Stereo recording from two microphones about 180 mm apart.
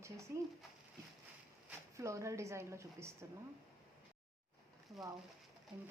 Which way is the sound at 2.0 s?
15° right (ahead or behind).